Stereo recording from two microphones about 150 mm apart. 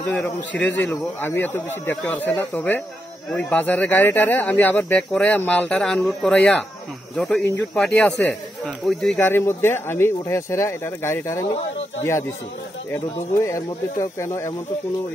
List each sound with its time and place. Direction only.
0.0 s speech: 10° left (ahead or behind)
7.4 s speech: 15° left (ahead or behind)
7.8 s speech: 5° left (ahead or behind)
9.2 s speech: 15° left (ahead or behind)